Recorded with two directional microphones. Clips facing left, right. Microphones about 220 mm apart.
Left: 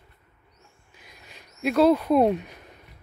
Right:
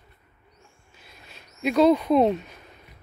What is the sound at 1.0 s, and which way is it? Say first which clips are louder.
Owl: even; 15° left (ahead or behind).